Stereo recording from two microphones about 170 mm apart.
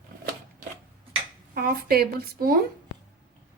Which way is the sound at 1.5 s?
60° right (ahead or behind).